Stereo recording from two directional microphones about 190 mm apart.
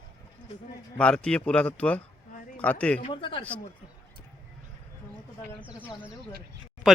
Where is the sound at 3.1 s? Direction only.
25° left (ahead or behind).